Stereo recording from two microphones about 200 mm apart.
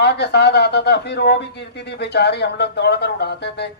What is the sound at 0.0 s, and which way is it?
A man's voice, 55° left (ahead or behind).